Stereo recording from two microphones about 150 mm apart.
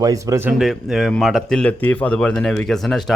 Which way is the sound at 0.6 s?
Centre (ahead or behind).